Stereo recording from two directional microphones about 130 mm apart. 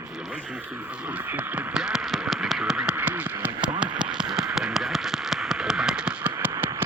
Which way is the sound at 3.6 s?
10° right (ahead or behind).